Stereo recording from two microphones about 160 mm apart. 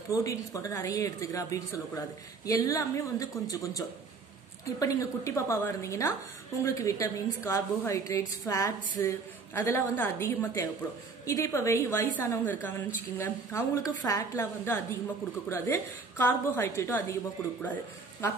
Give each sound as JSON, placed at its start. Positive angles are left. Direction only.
{"t": 0.1, "sound": "a woman's voice", "side_deg": 20}